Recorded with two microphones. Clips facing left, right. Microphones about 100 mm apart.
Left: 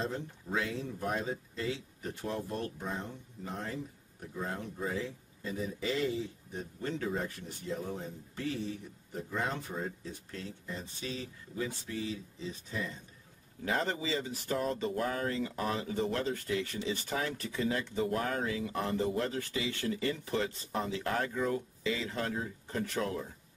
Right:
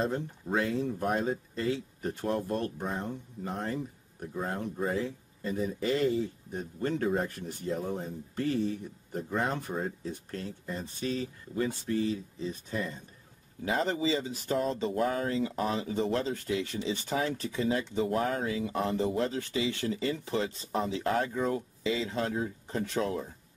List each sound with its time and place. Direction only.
0.0 s speech: 50° right (ahead or behind)
4.4 s speech: 50° right (ahead or behind)
13.7 s speech: 20° right (ahead or behind)